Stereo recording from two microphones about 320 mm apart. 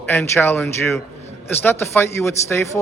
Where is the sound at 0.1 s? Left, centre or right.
Centre.